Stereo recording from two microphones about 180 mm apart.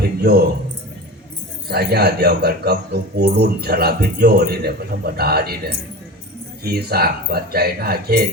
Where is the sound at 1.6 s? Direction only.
60° right (ahead or behind).